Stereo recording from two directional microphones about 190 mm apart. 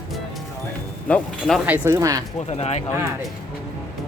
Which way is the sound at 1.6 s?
10° right (ahead or behind).